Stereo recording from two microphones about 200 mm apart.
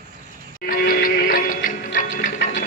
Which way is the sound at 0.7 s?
45° left (ahead or behind).